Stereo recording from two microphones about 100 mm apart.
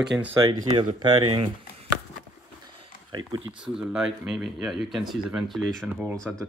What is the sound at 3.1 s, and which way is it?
Speech, 50° right (ahead or behind).